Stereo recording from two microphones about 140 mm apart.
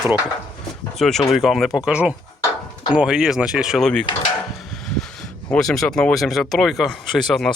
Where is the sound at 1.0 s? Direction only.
Centre (ahead or behind).